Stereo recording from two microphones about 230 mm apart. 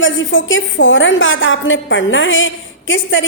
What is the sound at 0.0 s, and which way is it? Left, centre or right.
A woman's voice, left.